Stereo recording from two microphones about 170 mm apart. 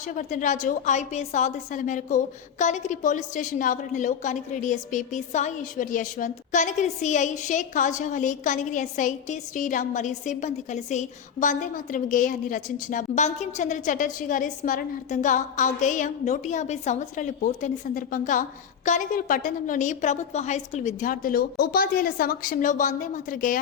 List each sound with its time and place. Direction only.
0.1 s a woman's voice: 50° left (ahead or behind)